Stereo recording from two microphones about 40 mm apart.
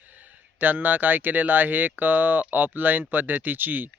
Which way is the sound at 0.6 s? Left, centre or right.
Right.